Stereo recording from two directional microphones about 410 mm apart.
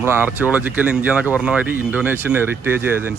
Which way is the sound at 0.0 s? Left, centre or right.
Centre.